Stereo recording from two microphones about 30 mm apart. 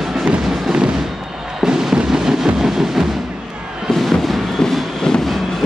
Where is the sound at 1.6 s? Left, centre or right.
Centre.